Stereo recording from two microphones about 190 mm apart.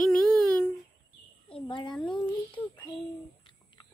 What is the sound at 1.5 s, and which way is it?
A child's voice, 25° left (ahead or behind).